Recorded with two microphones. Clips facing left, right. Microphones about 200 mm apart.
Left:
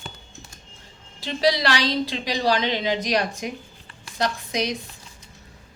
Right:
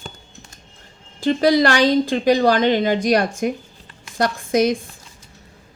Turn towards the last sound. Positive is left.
turn(degrees=-50)  # may be behind; listen again after turning